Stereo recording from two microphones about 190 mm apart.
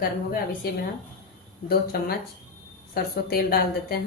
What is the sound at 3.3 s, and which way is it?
Speech, 50° left (ahead or behind).